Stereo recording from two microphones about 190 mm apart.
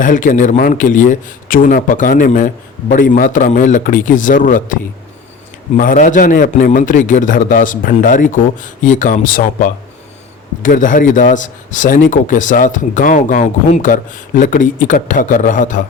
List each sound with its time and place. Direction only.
0.0 s a man's voice: 45° left (ahead or behind)